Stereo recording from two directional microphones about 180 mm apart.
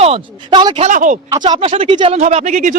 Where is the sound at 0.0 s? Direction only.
30° right (ahead or behind).